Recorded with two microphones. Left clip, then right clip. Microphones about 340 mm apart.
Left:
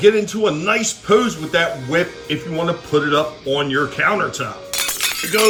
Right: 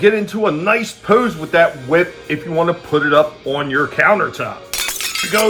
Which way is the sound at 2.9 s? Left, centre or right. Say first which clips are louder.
Right 4 dB; centre.